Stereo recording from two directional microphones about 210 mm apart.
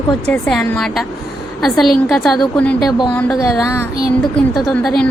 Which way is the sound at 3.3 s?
15° left (ahead or behind).